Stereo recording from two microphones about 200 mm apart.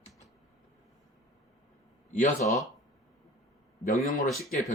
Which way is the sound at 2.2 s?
40° left (ahead or behind).